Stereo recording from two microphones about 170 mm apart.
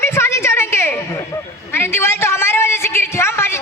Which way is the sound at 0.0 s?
15° left (ahead or behind).